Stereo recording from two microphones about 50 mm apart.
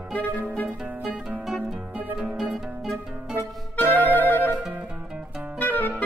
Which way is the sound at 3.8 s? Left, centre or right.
Left.